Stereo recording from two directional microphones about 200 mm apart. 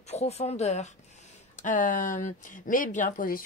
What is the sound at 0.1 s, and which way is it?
Speech, 35° left (ahead or behind).